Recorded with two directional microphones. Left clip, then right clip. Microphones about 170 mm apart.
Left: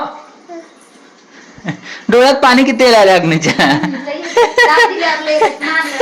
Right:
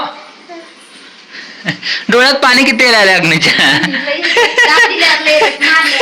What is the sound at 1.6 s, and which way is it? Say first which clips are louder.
Speech: right 7 dB; 15° left (ahead or behind).